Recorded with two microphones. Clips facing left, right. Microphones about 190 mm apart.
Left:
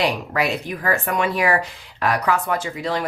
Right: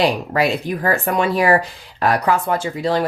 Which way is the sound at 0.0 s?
30° right (ahead or behind).